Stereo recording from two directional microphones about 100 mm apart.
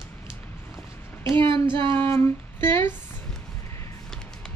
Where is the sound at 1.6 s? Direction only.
50° right (ahead or behind).